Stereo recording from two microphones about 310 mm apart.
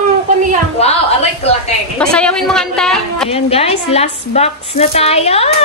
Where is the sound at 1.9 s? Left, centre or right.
Centre.